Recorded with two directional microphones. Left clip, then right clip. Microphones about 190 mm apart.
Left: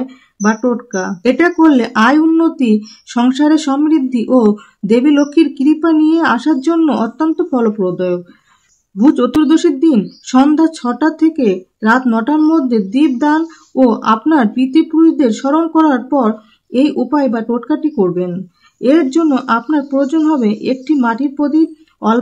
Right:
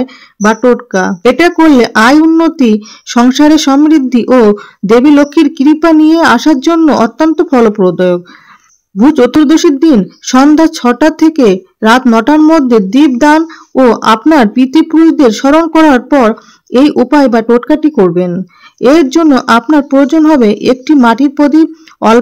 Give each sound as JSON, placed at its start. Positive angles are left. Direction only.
{"t": 0.0, "sound": "a woman's voice", "side_deg": -35}